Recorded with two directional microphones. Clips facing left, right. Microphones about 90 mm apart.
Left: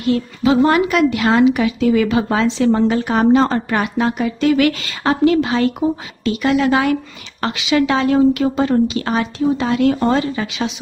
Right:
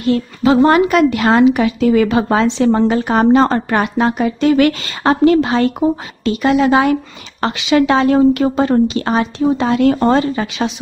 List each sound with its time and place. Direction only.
0.0 s a woman's voice: 45° right (ahead or behind)